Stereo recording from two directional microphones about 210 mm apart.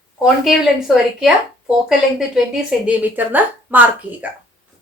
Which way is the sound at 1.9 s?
5° right (ahead or behind).